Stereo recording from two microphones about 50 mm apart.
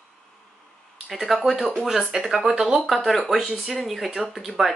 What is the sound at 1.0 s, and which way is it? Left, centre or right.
Speech, centre.